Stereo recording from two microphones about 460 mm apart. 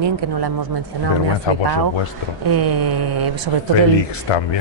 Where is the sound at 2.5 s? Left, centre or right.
Right.